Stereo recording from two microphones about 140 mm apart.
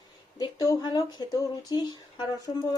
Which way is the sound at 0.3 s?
30° left (ahead or behind).